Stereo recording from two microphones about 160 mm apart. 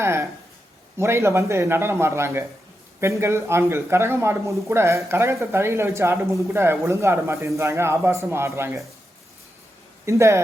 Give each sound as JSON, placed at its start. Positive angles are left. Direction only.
{"t": 0.0, "sound": "a sound", "side_deg": -15}
{"t": 0.9, "sound": "a man's voice", "side_deg": -15}
{"t": 10.1, "sound": "a man's voice", "side_deg": -15}